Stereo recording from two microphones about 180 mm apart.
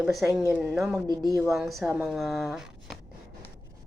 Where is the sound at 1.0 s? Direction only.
20° right (ahead or behind).